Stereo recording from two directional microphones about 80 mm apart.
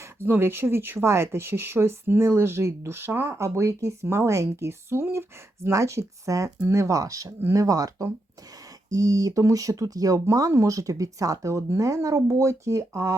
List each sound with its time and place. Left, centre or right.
0.2 s speech: right